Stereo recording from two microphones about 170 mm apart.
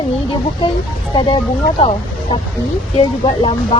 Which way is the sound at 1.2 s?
30° left (ahead or behind).